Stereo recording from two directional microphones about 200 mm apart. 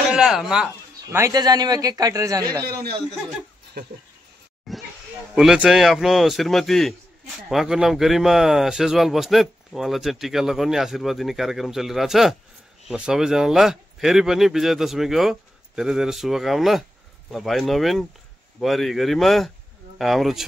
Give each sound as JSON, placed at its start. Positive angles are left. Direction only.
{"t": 0.1, "sound": "speech", "side_deg": 0}
{"t": 1.1, "sound": "a man's voice", "side_deg": -15}
{"t": 4.7, "sound": "snake", "side_deg": 0}
{"t": 5.3, "sound": "speech", "side_deg": -5}